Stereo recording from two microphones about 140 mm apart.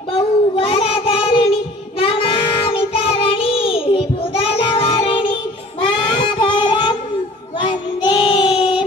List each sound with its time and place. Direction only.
0.6 s child singing: 40° left (ahead or behind)